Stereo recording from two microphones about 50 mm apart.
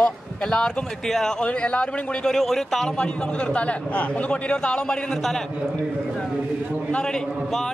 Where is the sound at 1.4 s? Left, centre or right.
Left.